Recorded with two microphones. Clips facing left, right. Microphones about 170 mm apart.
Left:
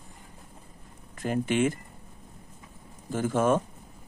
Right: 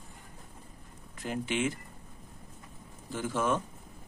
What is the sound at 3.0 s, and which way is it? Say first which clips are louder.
Speech: left 6 dB; 50° left (ahead or behind).